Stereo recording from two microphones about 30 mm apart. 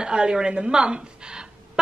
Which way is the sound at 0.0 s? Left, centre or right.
Right.